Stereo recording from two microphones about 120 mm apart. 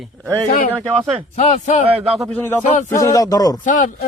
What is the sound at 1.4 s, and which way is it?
Speech, 75° left (ahead or behind).